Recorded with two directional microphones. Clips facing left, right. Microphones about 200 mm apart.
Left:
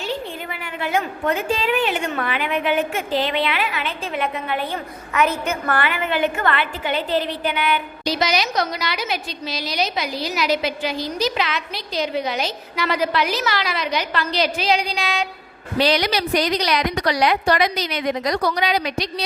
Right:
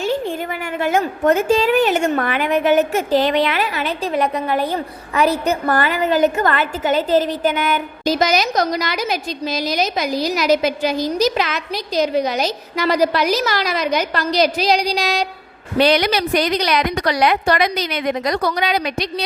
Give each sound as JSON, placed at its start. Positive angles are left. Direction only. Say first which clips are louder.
{"t": 0.8, "sound": "a woman's voice", "louder": "right 5 dB", "side_deg": -45}
{"t": 15.8, "sound": "a woman's voice", "louder": "right 4 dB", "side_deg": -55}